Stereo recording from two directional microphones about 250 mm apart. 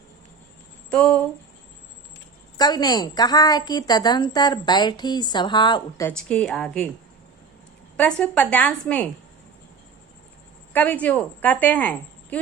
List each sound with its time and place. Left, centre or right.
0.9 s speech: centre
2.6 s a woman's voice: centre
6.1 s a woman's voice: centre
7.9 s a woman's voice: centre
10.7 s a woman's voice: centre